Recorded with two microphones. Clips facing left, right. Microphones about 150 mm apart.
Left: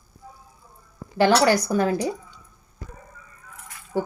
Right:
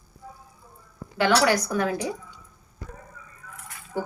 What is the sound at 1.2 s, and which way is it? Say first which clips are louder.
Speech: left 3 dB; 35° left (ahead or behind).